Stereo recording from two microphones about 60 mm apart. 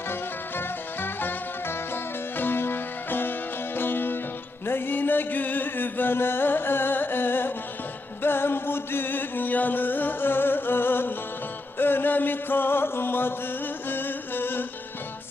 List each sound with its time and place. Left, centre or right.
1.0 s music: left